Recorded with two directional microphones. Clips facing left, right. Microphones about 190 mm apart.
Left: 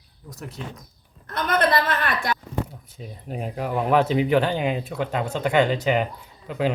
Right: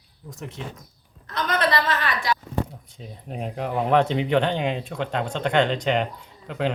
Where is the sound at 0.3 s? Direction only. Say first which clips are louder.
Right 1 dB; centre (ahead or behind).